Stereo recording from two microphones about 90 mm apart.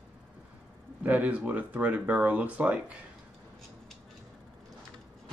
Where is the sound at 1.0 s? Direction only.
15° right (ahead or behind).